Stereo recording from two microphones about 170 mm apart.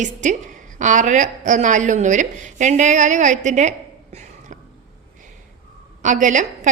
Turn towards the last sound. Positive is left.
turn(degrees=-45)  # may be behind; listen again after turning